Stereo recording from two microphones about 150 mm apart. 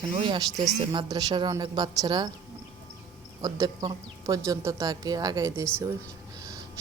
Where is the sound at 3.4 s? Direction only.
25° right (ahead or behind).